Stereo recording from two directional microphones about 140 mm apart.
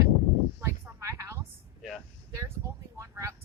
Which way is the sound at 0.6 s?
15° right (ahead or behind).